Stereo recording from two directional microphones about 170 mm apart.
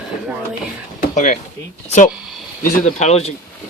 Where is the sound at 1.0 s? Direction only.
45° left (ahead or behind).